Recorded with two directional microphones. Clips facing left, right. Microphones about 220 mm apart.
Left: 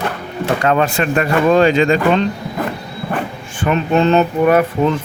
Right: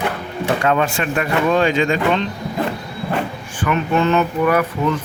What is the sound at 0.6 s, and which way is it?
Speech, 40° left (ahead or behind).